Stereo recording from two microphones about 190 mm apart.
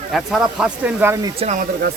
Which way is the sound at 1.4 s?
40° right (ahead or behind).